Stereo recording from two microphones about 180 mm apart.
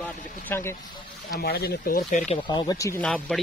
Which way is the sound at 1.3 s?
60° left (ahead or behind).